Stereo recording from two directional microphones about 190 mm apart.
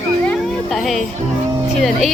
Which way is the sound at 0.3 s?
Centre (ahead or behind).